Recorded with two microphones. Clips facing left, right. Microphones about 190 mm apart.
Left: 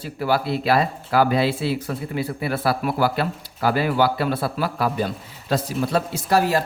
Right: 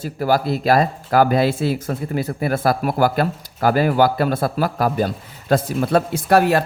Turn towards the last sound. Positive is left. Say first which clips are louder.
# right 4 dB
turn(degrees=-60)  # may be behind; listen again after turning